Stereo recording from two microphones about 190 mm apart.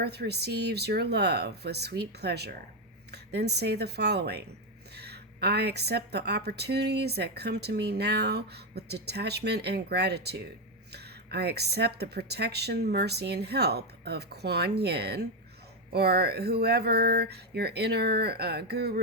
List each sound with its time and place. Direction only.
0.0 s a woman's voice: 60° right (ahead or behind)